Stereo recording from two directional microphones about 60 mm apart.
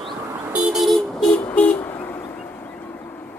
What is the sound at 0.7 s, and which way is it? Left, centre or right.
Vehicle, centre.